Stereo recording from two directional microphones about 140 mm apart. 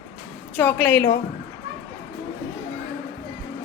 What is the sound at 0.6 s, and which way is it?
Speech, 15° left (ahead or behind).